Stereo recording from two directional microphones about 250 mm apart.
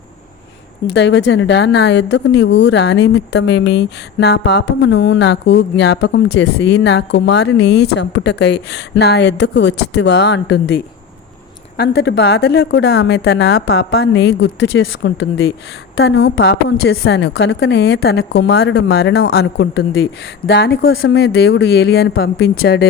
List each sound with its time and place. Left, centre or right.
0.9 s a woman's voice: left
11.8 s a woman's voice: left